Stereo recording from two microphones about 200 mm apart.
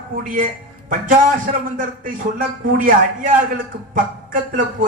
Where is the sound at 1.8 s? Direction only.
45° right (ahead or behind).